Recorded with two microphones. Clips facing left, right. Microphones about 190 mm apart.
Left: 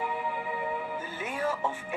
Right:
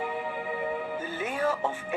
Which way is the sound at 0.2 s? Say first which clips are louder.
Right 1 dB; 50° right (ahead or behind).